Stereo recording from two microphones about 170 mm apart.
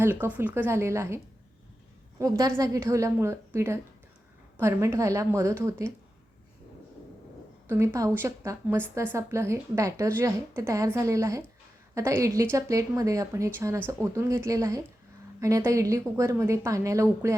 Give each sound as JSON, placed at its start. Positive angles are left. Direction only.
{"t": 0.0, "sound": "a woman's voice", "side_deg": -10}
{"t": 7.7, "sound": "a woman's voice", "side_deg": -15}